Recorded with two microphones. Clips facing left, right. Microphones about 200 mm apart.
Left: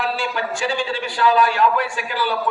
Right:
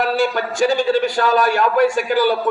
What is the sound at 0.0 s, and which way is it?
A man's voice, 45° right (ahead or behind).